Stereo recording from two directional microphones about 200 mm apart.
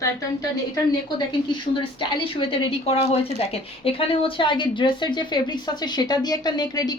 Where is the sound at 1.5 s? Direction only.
25° left (ahead or behind).